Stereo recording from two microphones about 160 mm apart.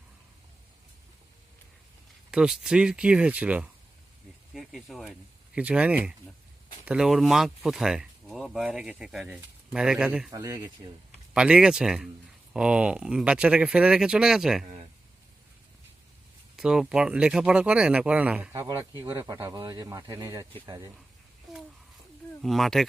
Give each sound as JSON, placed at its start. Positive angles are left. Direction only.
{"t": 2.3, "sound": "speech", "side_deg": -5}
{"t": 10.3, "sound": "speech", "side_deg": -20}
{"t": 11.3, "sound": "speech", "side_deg": -5}
{"t": 16.6, "sound": "speech", "side_deg": -5}
{"t": 22.4, "sound": "speech", "side_deg": 0}